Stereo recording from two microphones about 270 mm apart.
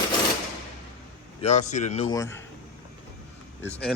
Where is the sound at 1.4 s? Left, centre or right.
Left.